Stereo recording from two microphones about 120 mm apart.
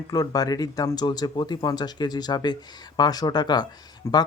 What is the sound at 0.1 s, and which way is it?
Speech, 30° left (ahead or behind).